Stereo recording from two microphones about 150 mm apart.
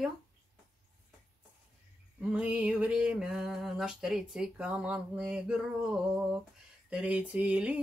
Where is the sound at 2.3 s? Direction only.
10° right (ahead or behind).